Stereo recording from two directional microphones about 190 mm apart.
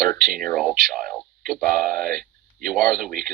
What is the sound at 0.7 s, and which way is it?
Speech, 45° right (ahead or behind).